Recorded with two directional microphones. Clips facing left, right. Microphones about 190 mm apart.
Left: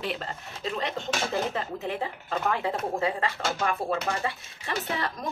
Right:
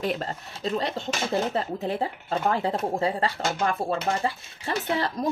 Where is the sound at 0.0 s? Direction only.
40° right (ahead or behind).